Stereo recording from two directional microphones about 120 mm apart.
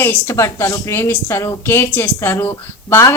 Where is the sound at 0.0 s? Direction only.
20° left (ahead or behind).